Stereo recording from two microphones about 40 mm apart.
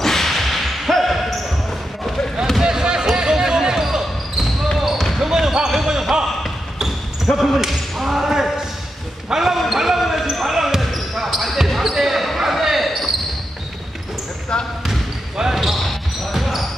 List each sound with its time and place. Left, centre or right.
0.0 s whip: centre
2.6 s basketball bounce: centre
4.9 s basketball bounce: centre
5.3 s basketball bounce: centre
7.2 s basketball bounce: centre
7.6 s whip: centre
9.3 s basketball bounce: centre
11.1 s a sound: centre
12.4 s basketball bounce: centre
14.5 s basketball bounce: centre
14.9 s a sound: centre
15.8 s basketball bounce: centre